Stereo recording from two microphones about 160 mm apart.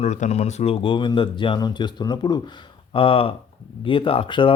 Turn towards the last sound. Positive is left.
turn(degrees=30)  # may be behind; listen again after turning